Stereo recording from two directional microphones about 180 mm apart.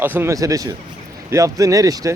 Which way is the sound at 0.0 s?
10° right (ahead or behind).